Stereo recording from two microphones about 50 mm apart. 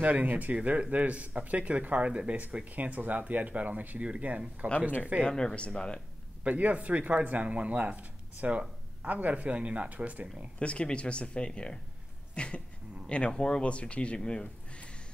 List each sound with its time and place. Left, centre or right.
0.0 s speech: right
5.2 s speech: centre
6.4 s speech: right
10.2 s speech: centre
10.6 s speech: left